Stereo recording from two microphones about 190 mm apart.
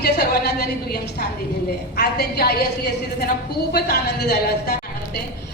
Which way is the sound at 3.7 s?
55° left (ahead or behind).